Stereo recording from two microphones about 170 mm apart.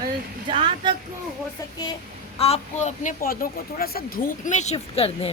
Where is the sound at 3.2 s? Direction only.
55° left (ahead or behind); by 5.3 s 35° left (ahead or behind).